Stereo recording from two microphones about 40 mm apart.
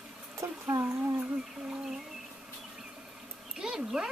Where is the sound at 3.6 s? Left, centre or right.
Centre.